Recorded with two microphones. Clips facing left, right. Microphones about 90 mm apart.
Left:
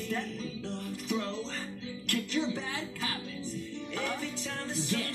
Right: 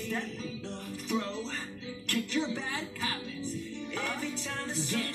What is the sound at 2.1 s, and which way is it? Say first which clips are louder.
Music: even; 25° right (ahead or behind).